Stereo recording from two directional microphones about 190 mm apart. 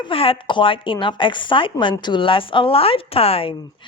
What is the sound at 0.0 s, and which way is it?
A woman's voice, 30° left (ahead or behind).